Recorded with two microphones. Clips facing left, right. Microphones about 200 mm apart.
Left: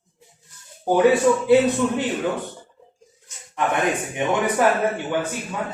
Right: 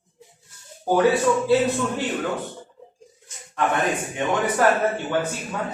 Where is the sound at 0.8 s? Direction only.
20° left (ahead or behind).